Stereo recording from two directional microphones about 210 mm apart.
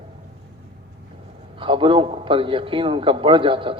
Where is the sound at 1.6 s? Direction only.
25° right (ahead or behind).